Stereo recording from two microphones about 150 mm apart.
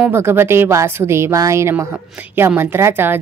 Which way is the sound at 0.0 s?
15° right (ahead or behind).